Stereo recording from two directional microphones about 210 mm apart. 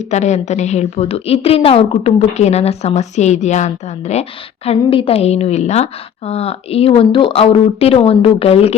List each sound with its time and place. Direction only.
0.0 s a woman's voice: 35° left (ahead or behind)